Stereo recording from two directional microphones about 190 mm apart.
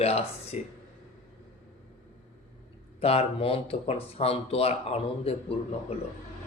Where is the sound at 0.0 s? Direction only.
30° left (ahead or behind).